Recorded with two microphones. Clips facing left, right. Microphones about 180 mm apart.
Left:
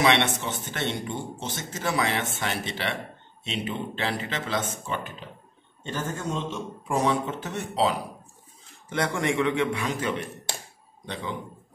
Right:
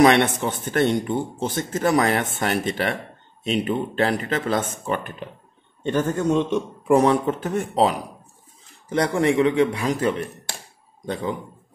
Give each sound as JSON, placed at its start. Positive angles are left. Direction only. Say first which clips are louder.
{"t": 0.0, "sound": "a man's voice", "louder": "right 7 dB", "side_deg": -50}
{"t": 8.8, "sound": "a man's voice", "louder": "right 6 dB", "side_deg": -35}